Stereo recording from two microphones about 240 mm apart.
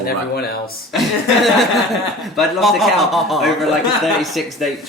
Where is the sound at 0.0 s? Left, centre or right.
Left.